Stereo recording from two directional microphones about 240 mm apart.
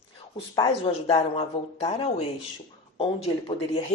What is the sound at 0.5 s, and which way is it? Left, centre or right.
Speech, centre.